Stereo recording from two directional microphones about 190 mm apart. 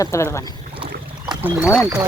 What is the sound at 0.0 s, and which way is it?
Speech, 15° left (ahead or behind).